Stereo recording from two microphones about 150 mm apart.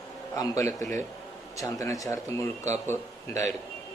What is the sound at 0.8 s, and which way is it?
Speech, 55° right (ahead or behind).